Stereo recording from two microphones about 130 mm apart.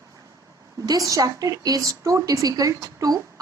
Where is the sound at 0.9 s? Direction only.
25° right (ahead or behind).